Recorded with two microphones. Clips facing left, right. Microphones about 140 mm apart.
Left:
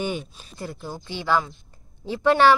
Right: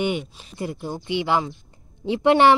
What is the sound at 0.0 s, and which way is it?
Speech, 20° right (ahead or behind).